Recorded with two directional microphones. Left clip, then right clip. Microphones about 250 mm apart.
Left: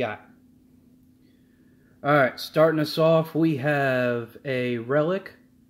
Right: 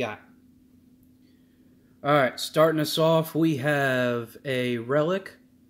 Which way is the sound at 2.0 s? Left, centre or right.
Centre.